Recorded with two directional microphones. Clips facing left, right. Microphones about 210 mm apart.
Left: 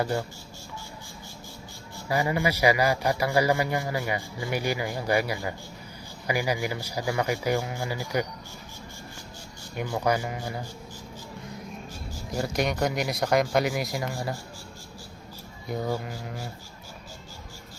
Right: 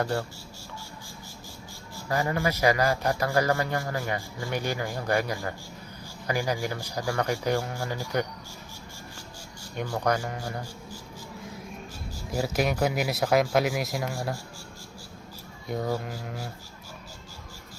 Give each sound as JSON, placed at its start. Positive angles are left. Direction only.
{"t": 0.0, "sound": "a man's voice", "side_deg": 5}
{"t": 2.0, "sound": "a man's voice", "side_deg": 10}
{"t": 9.7, "sound": "a man's voice", "side_deg": 5}
{"t": 12.3, "sound": "speech", "side_deg": 0}
{"t": 15.6, "sound": "speech", "side_deg": 0}